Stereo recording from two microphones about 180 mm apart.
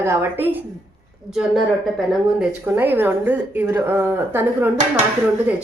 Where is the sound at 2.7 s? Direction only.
10° right (ahead or behind).